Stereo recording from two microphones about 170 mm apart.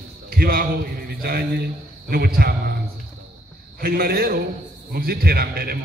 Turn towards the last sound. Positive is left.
turn(degrees=-65)  # may be behind; listen again after turning